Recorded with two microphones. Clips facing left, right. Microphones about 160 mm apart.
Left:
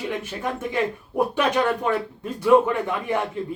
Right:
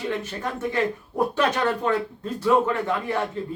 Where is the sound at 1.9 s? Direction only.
15° left (ahead or behind).